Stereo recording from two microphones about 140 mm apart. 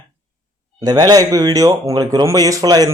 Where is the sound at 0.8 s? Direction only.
25° right (ahead or behind).